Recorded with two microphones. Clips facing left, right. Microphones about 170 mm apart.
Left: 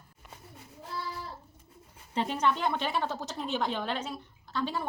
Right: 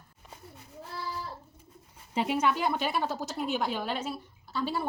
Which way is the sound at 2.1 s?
10° right (ahead or behind).